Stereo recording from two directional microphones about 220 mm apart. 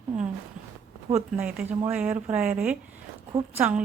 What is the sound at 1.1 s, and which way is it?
Speech, 5° right (ahead or behind).